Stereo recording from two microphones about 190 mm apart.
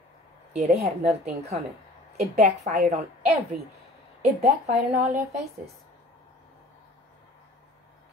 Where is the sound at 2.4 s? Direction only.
40° right (ahead or behind).